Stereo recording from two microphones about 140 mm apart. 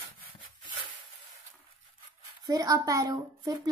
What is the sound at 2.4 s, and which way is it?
A woman's voice, 25° right (ahead or behind).